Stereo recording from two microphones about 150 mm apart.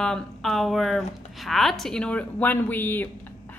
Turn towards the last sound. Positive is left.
turn(degrees=10)  # may be behind; listen again after turning